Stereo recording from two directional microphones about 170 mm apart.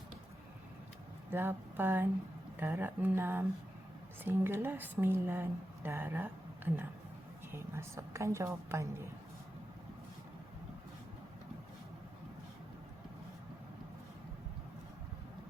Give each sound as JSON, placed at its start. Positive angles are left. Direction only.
{"t": 1.3, "sound": "speech", "side_deg": -15}
{"t": 7.5, "sound": "speech", "side_deg": -15}